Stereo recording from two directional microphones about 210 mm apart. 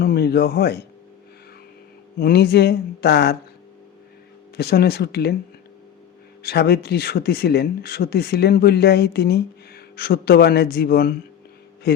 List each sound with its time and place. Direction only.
0.0 s speech: 50° left (ahead or behind)
2.1 s speech: 50° left (ahead or behind)
4.5 s speech: 50° left (ahead or behind)
6.4 s speech: 50° left (ahead or behind)